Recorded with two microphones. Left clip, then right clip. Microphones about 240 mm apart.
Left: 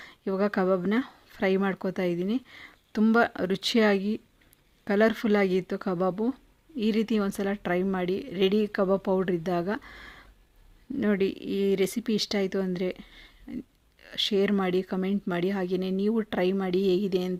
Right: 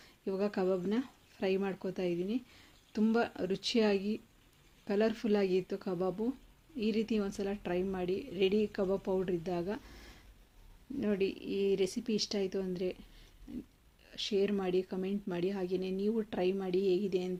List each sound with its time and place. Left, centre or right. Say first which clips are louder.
0.0 s speech: left 7 dB; left
11.0 s speech: left 7 dB; left